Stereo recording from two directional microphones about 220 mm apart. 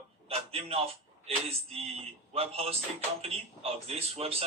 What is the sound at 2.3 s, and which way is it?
A man's voice, 25° right (ahead or behind).